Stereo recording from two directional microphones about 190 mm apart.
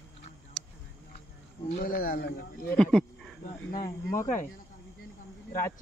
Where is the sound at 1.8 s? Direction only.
50° left (ahead or behind).